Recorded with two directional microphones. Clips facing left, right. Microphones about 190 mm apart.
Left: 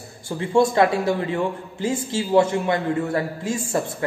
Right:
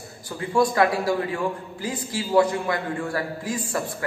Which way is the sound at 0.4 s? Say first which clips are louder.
Left 3 dB; 25° left (ahead or behind).